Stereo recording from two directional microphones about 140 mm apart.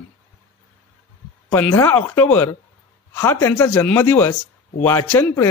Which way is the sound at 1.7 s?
15° left (ahead or behind).